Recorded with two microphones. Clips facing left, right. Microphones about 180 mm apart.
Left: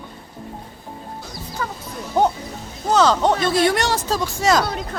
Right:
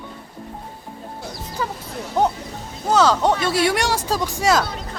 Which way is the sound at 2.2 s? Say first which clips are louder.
Left 2 dB; centre (ahead or behind).